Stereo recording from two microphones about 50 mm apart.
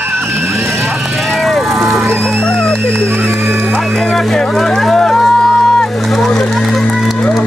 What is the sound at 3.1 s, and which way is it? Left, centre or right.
Speech, right.